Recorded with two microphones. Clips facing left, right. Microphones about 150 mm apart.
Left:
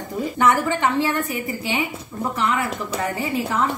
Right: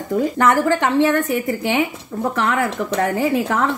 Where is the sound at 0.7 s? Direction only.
65° right (ahead or behind).